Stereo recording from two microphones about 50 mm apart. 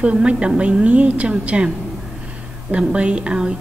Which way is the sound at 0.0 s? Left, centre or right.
Right.